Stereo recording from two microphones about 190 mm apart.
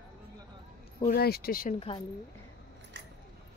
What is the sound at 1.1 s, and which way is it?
Speech, 55° left (ahead or behind).